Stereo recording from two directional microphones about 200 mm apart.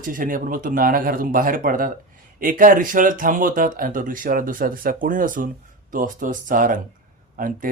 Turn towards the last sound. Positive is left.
turn(degrees=-45)  # may be behind; listen again after turning